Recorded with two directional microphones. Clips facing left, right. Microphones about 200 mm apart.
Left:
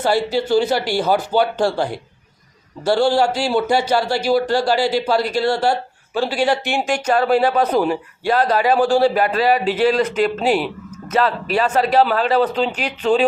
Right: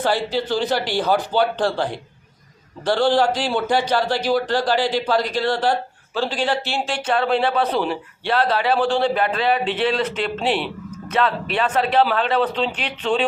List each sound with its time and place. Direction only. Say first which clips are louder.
0.0 s a man's voice: left 3 dB; 10° left (ahead or behind)
7.5 s speech: left 4 dB; 45° left (ahead or behind)
8.5 s a man's voice: left 4 dB; 10° left (ahead or behind)